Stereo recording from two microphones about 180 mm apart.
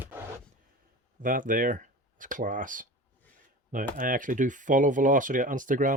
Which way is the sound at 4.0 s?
50° right (ahead or behind).